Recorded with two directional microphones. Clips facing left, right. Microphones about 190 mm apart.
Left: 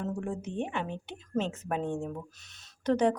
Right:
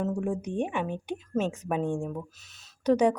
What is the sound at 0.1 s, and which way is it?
Speech, 10° right (ahead or behind).